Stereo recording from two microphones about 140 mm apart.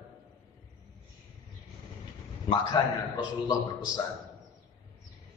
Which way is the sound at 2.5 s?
25° left (ahead or behind).